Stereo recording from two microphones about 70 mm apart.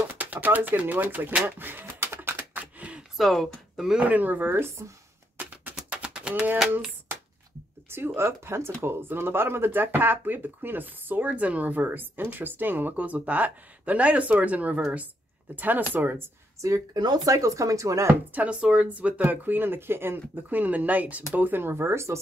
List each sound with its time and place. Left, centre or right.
0.2 s speech: right
1.4 s a sound: right
2.6 s a sound: centre
3.2 s speech: centre
4.0 s speech: right
5.4 s a sound: right
7.9 s a woman's voice: right; by 15.0 s centre
15.5 s speech: right
16.6 s speech: right
17.0 s speech: right
17.3 s speech: right
18.3 s speech: centre; by 22.2 s right